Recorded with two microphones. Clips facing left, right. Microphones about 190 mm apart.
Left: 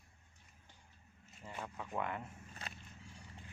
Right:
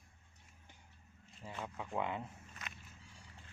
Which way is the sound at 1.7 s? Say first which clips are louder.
Right 2 dB; 15° right (ahead or behind).